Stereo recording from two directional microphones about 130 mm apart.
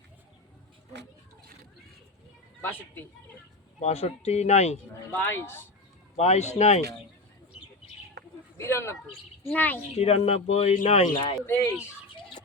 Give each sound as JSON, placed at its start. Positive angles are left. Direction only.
{"t": 2.6, "sound": "speech", "side_deg": 15}
{"t": 3.8, "sound": "speech", "side_deg": 60}
{"t": 5.1, "sound": "speech", "side_deg": 15}
{"t": 6.1, "sound": "speech", "side_deg": 55}
{"t": 8.5, "sound": "speech", "side_deg": 20}
{"t": 10.0, "sound": "speech", "side_deg": 50}
{"t": 11.4, "sound": "speech", "side_deg": 20}